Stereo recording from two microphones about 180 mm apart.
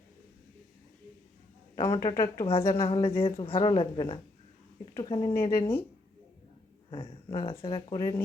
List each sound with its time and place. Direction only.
1.9 s speech: 20° left (ahead or behind)
2.5 s speech: 30° left (ahead or behind)
7.4 s speech: 30° left (ahead or behind)